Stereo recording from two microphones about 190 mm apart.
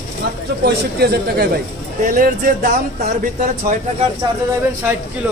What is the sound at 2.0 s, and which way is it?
Speech, 45° right (ahead or behind).